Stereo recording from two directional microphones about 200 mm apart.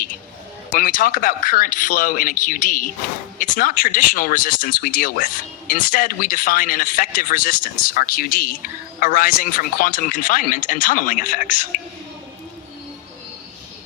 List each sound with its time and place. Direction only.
0.7 s speech: 45° left (ahead or behind)